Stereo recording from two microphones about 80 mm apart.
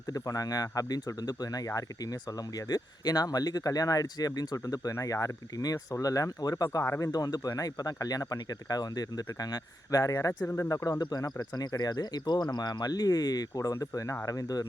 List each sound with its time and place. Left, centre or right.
0.1 s speech: left
6.8 s speech: left
7.1 s speech: left
10.4 s speech: left
10.7 s speech: left